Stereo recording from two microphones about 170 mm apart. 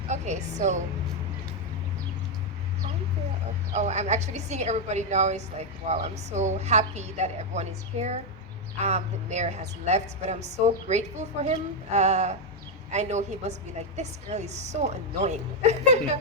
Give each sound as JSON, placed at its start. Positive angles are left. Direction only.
{"t": 0.1, "sound": "a woman's voice", "side_deg": -45}
{"t": 3.8, "sound": "a woman's voice", "side_deg": -40}